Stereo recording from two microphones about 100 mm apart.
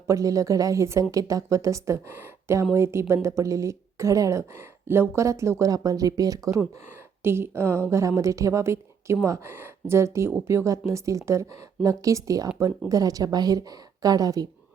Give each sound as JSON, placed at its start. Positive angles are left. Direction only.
{"t": 0.1, "sound": "speech", "side_deg": -35}
{"t": 7.2, "sound": "speech", "side_deg": -25}